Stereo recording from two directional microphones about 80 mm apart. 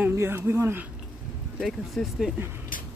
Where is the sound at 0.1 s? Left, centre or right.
Right.